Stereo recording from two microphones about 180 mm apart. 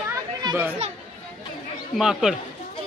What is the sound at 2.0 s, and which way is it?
Speech, 5° right (ahead or behind).